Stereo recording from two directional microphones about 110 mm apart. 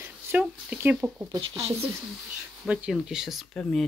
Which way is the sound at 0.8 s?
20° right (ahead or behind).